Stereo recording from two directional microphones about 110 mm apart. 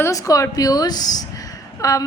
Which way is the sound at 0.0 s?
30° left (ahead or behind).